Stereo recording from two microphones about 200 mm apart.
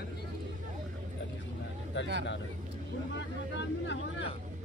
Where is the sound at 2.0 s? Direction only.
60° left (ahead or behind).